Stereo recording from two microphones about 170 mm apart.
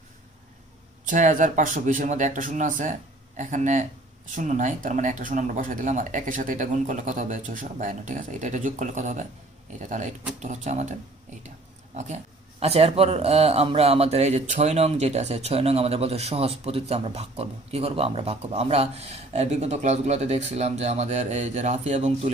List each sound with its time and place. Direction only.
1.0 s speech: 50° right (ahead or behind)
11.9 s speech: 45° right (ahead or behind)